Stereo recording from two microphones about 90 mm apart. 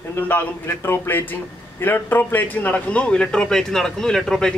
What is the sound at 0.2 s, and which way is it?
A man's voice, 20° left (ahead or behind).